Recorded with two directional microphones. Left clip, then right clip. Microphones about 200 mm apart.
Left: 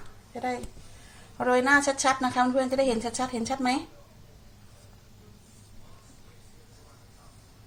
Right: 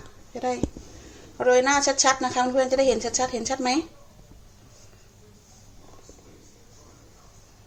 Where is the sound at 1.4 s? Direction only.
30° right (ahead or behind).